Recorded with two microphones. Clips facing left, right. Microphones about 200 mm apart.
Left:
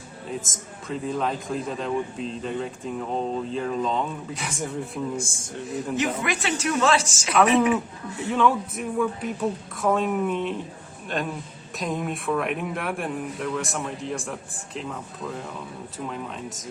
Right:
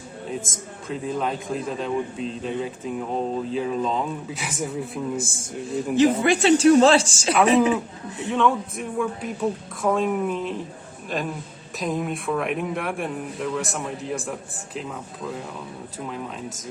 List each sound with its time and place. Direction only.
0.3 s a man's voice: centre (ahead or behind)
5.6 s a woman's voice: 30° right (ahead or behind)
8.3 s a man's voice: centre (ahead or behind)
16.0 s a man's voice: centre (ahead or behind)